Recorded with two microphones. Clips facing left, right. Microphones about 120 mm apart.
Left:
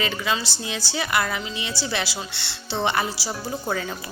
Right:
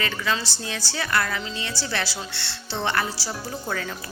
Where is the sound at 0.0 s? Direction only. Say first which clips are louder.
Left 1 dB; 20° left (ahead or behind).